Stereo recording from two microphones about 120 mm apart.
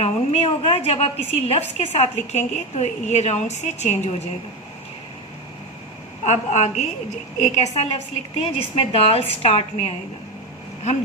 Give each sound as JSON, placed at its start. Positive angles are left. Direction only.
{"t": 0.0, "sound": "a woman's voice", "side_deg": 55}
{"t": 6.2, "sound": "a woman's voice", "side_deg": 75}
{"t": 8.4, "sound": "a woman's voice", "side_deg": 50}